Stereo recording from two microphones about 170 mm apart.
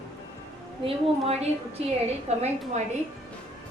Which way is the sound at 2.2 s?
40° right (ahead or behind).